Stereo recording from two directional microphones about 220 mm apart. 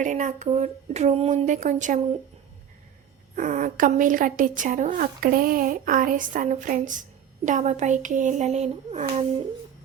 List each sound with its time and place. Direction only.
0.0 s a woman's voice: 35° right (ahead or behind)
3.3 s a woman's voice: 35° right (ahead or behind)